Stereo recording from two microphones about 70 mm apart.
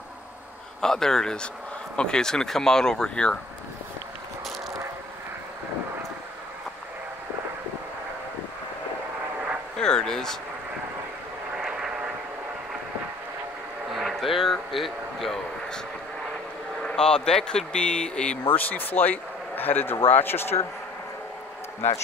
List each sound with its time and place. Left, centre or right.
0.7 s speech: centre
9.8 s speech: centre
11.5 s vehicle: centre
13.9 s a sound: centre
16.8 s speech: centre
18.5 s speech: left